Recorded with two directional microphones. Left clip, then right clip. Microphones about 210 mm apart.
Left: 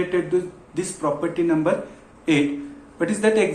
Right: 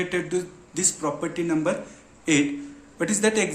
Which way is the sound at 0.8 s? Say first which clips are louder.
Left 3 dB; 40° right (ahead or behind).